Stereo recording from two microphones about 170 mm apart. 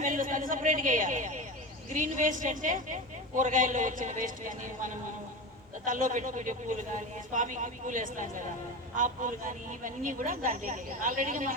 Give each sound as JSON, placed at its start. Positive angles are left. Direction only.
{"t": 0.0, "sound": "a man's voice", "side_deg": -50}